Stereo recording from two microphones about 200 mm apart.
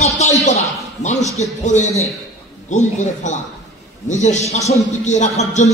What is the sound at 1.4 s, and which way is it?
Speech, 35° left (ahead or behind).